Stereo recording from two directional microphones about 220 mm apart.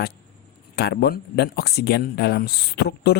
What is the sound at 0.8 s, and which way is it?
Speech, 45° left (ahead or behind).